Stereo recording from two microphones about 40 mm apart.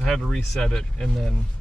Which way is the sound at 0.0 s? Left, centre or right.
Centre.